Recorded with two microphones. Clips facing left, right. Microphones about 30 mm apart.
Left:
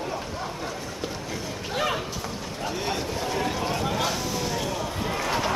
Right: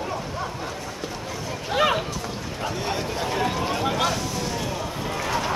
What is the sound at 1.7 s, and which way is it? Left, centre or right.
Run, right.